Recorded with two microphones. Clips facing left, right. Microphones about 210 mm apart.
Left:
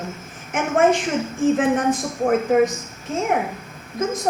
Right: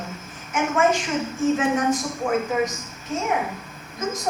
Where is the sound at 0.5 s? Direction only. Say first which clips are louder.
Left 3 dB; 55° left (ahead or behind).